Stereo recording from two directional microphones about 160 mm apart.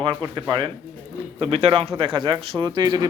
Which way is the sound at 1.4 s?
35° right (ahead or behind).